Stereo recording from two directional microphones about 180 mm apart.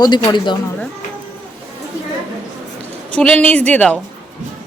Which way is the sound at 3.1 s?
5° left (ahead or behind).